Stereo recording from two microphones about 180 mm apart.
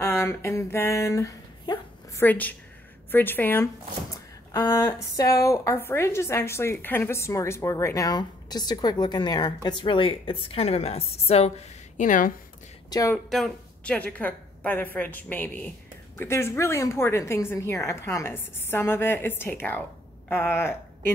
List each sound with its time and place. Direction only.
0.0 s a sound: 15° left (ahead or behind)
3.1 s speech: 10° left (ahead or behind); by 11.5 s 35° left (ahead or behind)
12.0 s a woman's voice: 45° left (ahead or behind)
12.9 s speech: 20° left (ahead or behind)
13.3 s a woman's voice: 5° left (ahead or behind)